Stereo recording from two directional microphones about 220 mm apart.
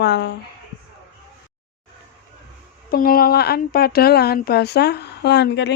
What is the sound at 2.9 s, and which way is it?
Speech, 40° left (ahead or behind).